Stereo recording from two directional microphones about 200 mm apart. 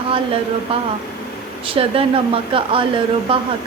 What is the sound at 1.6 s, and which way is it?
Speech, 30° right (ahead or behind).